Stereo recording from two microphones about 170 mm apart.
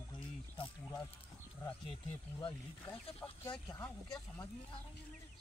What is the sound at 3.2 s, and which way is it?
Speech, 10° left (ahead or behind).